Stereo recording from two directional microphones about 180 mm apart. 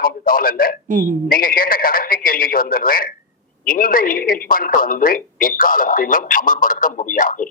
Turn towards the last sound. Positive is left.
turn(degrees=50)  # may be behind; listen again after turning